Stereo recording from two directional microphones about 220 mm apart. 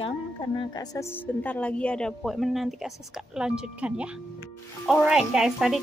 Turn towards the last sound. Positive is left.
turn(degrees=0)  # may be behind; listen again after turning